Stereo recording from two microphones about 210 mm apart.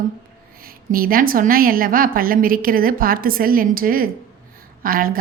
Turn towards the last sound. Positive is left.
turn(degrees=-45)  # may be behind; listen again after turning